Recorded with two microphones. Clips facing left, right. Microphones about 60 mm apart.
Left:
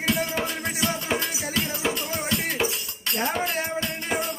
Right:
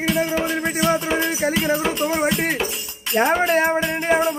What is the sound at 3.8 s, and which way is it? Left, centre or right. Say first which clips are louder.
Music: right 9 dB; centre.